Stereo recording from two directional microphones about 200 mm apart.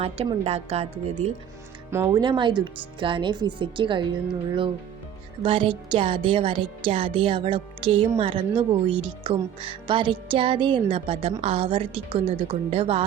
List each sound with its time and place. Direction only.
0.0 s a woman's voice: 30° right (ahead or behind)
1.9 s speech: 15° right (ahead or behind)